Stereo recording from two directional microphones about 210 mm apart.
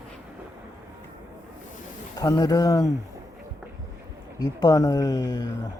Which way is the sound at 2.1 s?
15° left (ahead or behind).